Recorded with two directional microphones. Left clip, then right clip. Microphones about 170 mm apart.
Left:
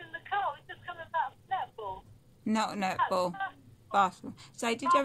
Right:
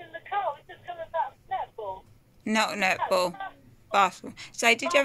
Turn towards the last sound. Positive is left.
turn(degrees=0)  # may be behind; listen again after turning